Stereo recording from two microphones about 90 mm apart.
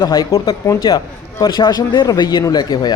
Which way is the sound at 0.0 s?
35° left (ahead or behind).